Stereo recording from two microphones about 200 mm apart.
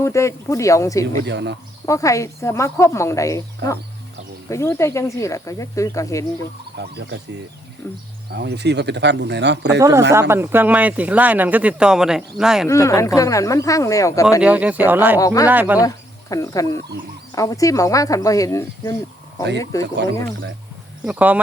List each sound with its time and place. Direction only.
0.0 s speech: 15° left (ahead or behind)
1.2 s speech: 60° right (ahead or behind)
1.9 s speech: 15° left (ahead or behind)
6.7 s speech: 60° right (ahead or behind)
7.8 s speech: 15° left (ahead or behind)
8.3 s speech: 55° right (ahead or behind)
10.1 s speech: 15° right (ahead or behind)
12.6 s speech: 15° left (ahead or behind)
14.4 s speech: 5° right (ahead or behind)
15.2 s speech: 15° left (ahead or behind)
15.4 s speech: 10° right (ahead or behind)
16.3 s speech: 15° left (ahead or behind)
21.0 s speech: 5° right (ahead or behind)